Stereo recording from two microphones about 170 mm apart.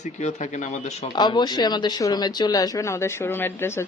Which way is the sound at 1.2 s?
25° left (ahead or behind).